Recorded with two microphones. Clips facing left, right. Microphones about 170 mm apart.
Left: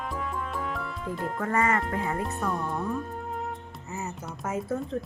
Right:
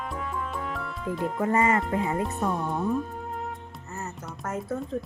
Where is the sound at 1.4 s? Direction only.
20° right (ahead or behind).